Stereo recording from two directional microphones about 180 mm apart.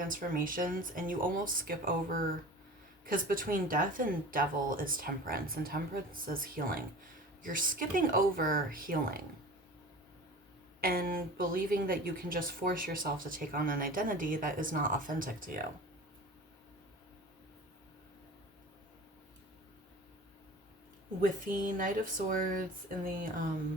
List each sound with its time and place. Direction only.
0.0 s speech: 50° right (ahead or behind)
10.8 s speech: 55° right (ahead or behind)
21.2 s speech: 45° right (ahead or behind)